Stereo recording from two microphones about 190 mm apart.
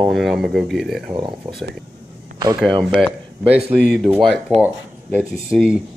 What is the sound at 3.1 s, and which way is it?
A man's voice, 5° right (ahead or behind).